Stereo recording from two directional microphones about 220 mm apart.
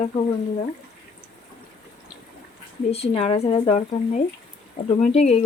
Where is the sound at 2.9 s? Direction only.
25° left (ahead or behind).